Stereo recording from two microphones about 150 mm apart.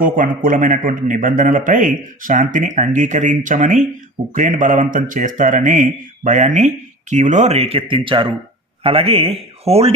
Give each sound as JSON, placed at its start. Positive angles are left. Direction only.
{"t": 0.0, "sound": "a man's voice", "side_deg": -65}